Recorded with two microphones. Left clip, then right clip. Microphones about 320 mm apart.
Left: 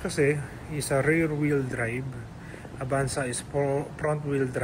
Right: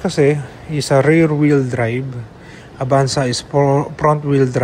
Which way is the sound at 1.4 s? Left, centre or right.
Centre.